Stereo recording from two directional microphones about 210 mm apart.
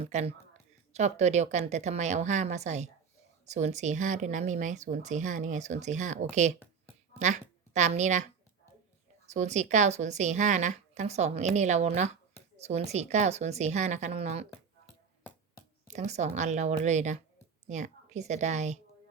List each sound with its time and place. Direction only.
0.0 s a woman's voice: 30° right (ahead or behind)
9.3 s speech: 35° right (ahead or behind)
15.9 s a woman's voice: 35° right (ahead or behind)